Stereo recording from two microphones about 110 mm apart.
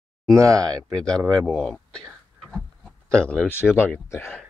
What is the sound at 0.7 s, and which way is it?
Speech, 5° left (ahead or behind).